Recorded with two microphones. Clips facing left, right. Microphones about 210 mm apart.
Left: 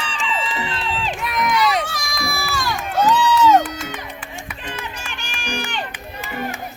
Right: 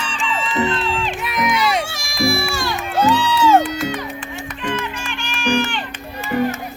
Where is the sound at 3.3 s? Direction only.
30° right (ahead or behind).